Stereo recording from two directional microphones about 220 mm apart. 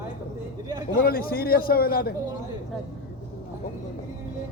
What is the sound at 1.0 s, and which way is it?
Speech, 45° left (ahead or behind).